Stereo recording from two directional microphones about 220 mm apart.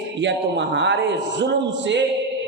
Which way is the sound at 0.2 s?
55° right (ahead or behind).